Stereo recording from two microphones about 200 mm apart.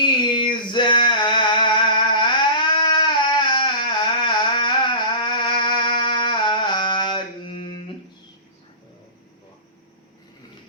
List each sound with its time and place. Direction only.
0.0 s music: 25° left (ahead or behind)